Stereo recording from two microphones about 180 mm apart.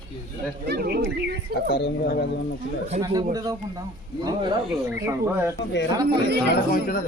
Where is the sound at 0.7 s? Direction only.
60° right (ahead or behind).